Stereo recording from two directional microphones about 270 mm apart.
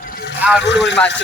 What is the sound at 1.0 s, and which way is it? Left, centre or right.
Speech, centre.